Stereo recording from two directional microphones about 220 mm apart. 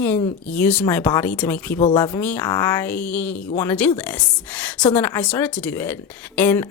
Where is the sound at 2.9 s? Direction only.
5° left (ahead or behind).